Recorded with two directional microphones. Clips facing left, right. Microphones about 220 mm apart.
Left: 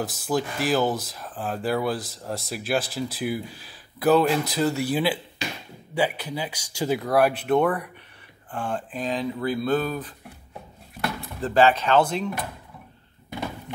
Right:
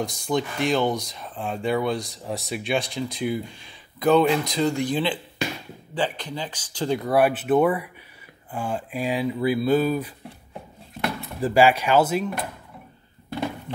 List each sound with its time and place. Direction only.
0.0 s speech: 5° left (ahead or behind)
11.4 s speech: 10° right (ahead or behind)